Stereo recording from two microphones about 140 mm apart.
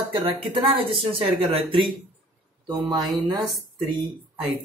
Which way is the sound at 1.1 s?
40° right (ahead or behind).